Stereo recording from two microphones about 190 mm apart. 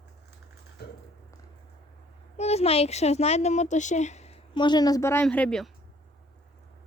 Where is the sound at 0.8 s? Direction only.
60° left (ahead or behind).